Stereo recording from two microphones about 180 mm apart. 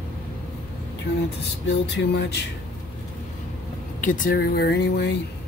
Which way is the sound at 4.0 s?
45° left (ahead or behind).